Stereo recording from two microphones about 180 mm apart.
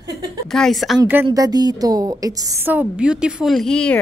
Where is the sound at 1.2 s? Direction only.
20° right (ahead or behind).